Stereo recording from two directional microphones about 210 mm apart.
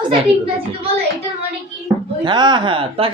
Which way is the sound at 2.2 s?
20° right (ahead or behind).